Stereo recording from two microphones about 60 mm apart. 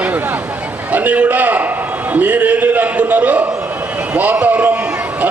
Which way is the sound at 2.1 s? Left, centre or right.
Right.